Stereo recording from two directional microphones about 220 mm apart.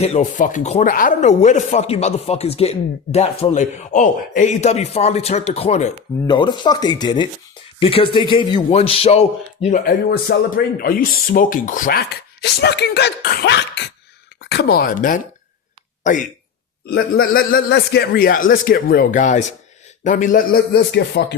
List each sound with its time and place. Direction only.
0.0 s speech: 30° left (ahead or behind)
10.1 s speech: 45° left (ahead or behind)
16.8 s speech: 45° left (ahead or behind)